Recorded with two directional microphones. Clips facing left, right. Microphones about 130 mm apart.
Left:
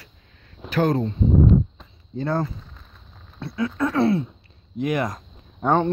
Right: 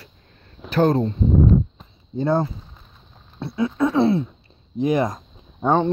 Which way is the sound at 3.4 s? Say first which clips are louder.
Right 3 dB; 25° right (ahead or behind).